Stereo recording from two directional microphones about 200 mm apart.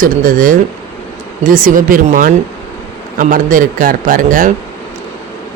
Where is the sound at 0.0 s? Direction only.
45° right (ahead or behind).